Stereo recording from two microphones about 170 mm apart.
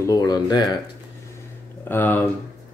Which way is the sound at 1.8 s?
10° left (ahead or behind).